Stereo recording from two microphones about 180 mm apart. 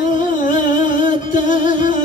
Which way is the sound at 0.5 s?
45° left (ahead or behind).